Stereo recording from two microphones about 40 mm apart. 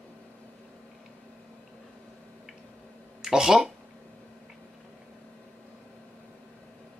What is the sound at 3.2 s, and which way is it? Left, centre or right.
Speech, centre.